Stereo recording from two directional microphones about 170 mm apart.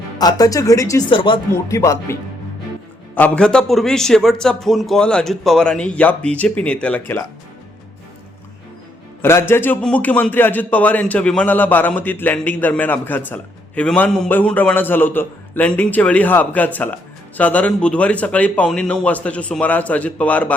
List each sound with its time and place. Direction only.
0.2 s speech: 20° left (ahead or behind)
1.1 s speech: 30° left (ahead or behind)
1.6 s a man's voice: 15° left (ahead or behind)
3.2 s a man's voice: 10° left (ahead or behind)
9.2 s a man's voice: 15° left (ahead or behind)